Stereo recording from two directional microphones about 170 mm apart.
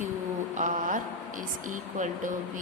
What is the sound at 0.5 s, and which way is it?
Speech, 50° right (ahead or behind).